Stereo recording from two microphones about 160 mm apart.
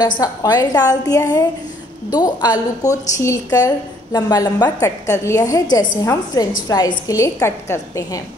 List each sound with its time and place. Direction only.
0.2 s a woman's voice: 20° left (ahead or behind)